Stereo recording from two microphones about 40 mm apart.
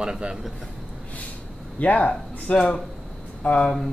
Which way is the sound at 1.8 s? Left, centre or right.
Left.